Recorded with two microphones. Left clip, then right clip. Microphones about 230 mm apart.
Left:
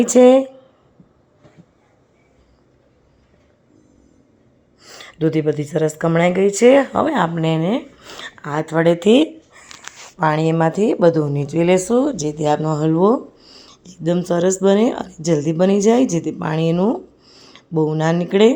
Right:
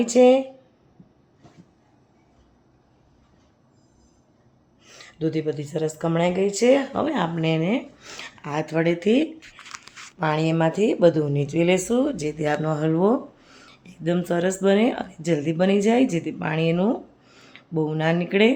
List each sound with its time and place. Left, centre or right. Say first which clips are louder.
0.0 s speech: left 5 dB; left
4.8 s speech: left 7 dB; left
8.0 s speech: left 5 dB; centre
9.7 s speech: left 7 dB; centre